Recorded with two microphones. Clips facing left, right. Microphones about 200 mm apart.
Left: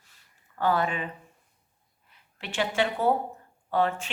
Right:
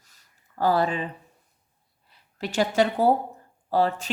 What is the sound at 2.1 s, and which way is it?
A woman's voice, 40° right (ahead or behind).